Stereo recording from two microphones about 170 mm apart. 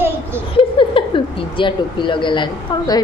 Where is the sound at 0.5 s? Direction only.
30° left (ahead or behind).